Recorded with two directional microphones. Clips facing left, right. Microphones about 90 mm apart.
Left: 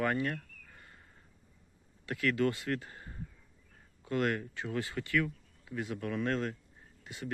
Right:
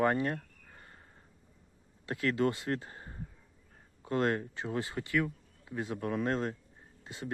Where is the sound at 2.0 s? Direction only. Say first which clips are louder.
Even; 30° right (ahead or behind).